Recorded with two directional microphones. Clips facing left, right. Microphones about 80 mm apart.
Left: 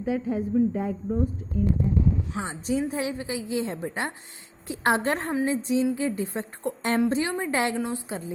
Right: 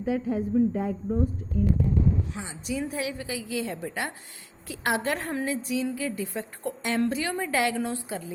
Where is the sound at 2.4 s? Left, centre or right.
Left.